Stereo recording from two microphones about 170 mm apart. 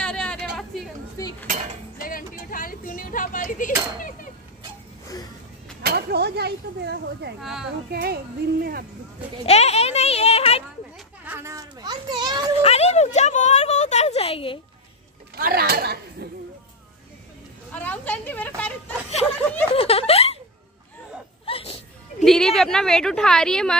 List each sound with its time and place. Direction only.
0.0 s a sound: 5° left (ahead or behind)
1.1 s cutlery: 20° left (ahead or behind)
2.0 s a sound: 55° left (ahead or behind)
5.8 s speech: 70° right (ahead or behind)
7.9 s speech: 65° right (ahead or behind)
9.5 s a sound: 40° left (ahead or behind)
11.2 s children playing: 15° right (ahead or behind)
12.6 s a sound: 40° left (ahead or behind)
15.3 s speech: 65° right (ahead or behind)
17.7 s a woman's voice: 10° left (ahead or behind)
19.7 s snicker: 35° left (ahead or behind)
21.5 s music: 35° left (ahead or behind)
22.2 s a woman's voice: centre (ahead or behind)